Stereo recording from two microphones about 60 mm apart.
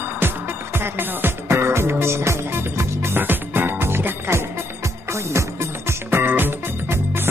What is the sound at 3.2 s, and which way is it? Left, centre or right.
Music, right.